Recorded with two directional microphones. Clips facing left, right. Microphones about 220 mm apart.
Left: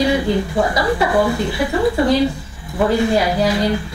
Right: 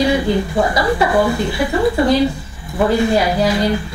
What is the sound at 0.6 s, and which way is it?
Speech, 20° right (ahead or behind).